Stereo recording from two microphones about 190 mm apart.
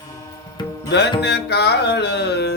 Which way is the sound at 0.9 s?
65° left (ahead or behind).